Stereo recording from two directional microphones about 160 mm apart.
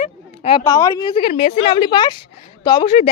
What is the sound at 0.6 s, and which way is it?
Speech, 20° left (ahead or behind).